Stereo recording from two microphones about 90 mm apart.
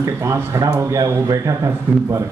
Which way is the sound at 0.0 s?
35° right (ahead or behind).